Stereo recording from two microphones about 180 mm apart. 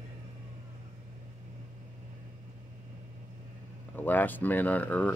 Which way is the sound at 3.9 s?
10° left (ahead or behind).